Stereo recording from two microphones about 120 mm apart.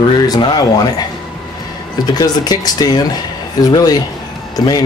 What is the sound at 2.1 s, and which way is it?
Speech, 35° left (ahead or behind).